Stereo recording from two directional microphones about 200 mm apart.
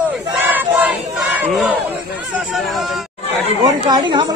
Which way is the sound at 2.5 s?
Centre (ahead or behind).